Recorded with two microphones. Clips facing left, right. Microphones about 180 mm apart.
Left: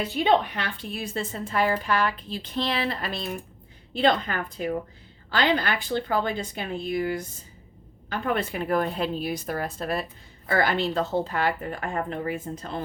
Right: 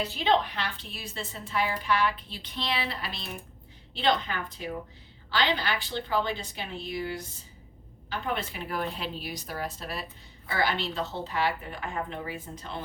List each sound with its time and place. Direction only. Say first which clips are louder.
0.0 s a woman's voice: left 4 dB; 55° left (ahead or behind)